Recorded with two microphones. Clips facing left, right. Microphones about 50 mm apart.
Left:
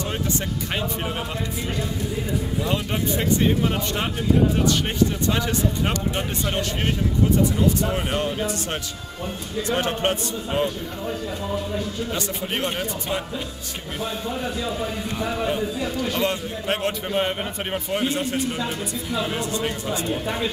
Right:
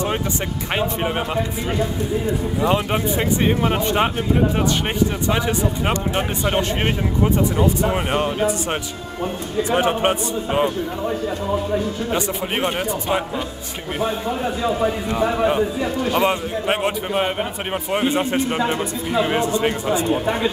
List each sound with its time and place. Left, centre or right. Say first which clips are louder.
0.7 s speech: right 7 dB; right
2.6 s a man's voice: right 8 dB; right
5.3 s a man's voice: right 3 dB; centre
9.6 s speech: right 5 dB; centre
11.1 s a man's voice: right 4 dB; right